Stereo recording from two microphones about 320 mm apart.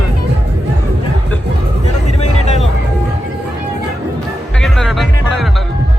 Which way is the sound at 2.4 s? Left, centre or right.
Left.